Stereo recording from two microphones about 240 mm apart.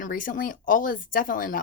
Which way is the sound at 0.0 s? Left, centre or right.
Left.